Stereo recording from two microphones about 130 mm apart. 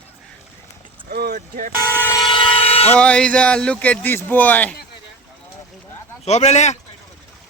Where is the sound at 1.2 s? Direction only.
90° right.